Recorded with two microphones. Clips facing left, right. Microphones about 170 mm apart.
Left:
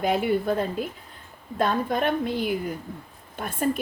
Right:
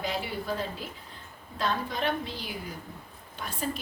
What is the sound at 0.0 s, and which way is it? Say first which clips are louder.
A woman's voice: left 10 dB; 55° left (ahead or behind).